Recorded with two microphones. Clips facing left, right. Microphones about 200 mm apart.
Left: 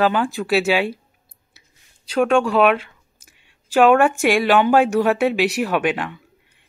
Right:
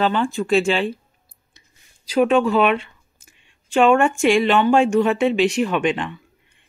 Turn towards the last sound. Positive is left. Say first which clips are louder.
# even
turn(degrees=5)  # may be behind; listen again after turning